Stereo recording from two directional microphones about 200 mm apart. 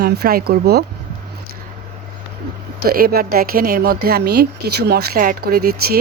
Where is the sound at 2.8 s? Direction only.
50° right (ahead or behind).